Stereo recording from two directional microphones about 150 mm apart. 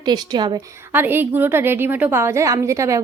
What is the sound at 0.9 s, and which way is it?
A woman's voice, 15° right (ahead or behind).